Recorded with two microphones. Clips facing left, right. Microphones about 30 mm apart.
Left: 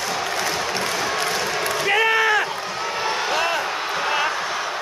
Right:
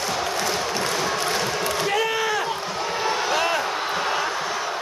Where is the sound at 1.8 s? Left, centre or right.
Left.